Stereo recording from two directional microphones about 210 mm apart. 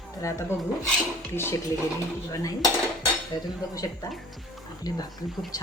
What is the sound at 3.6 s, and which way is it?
A woman's voice, 15° left (ahead or behind).